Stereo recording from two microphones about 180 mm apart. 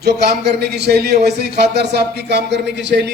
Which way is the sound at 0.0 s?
65° right (ahead or behind).